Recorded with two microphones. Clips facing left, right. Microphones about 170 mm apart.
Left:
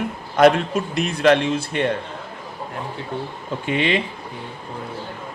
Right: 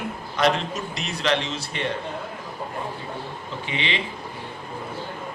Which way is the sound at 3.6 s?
50° left (ahead or behind).